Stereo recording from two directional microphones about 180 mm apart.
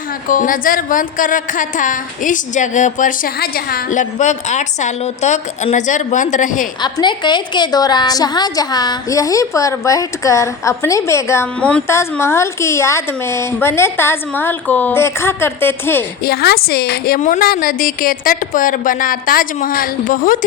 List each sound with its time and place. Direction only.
0.3 s a woman's voice: 50° left (ahead or behind)
6.8 s a woman's voice: 25° left (ahead or behind)
16.2 s a woman's voice: 60° left (ahead or behind)